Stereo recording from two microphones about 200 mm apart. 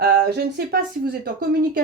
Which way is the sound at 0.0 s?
50° right (ahead or behind).